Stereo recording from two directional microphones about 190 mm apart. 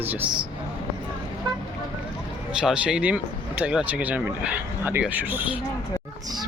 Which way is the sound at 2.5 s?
5° right (ahead or behind).